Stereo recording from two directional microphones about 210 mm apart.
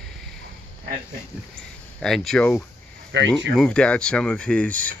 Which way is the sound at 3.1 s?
60° right (ahead or behind).